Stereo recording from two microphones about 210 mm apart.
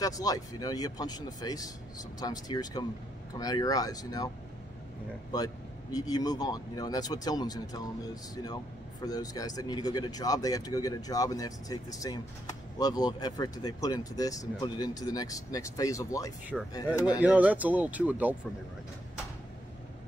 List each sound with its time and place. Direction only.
0.0 s speech: 15° left (ahead or behind)
5.3 s speech: 20° left (ahead or behind)
17.2 s speech: 5° right (ahead or behind)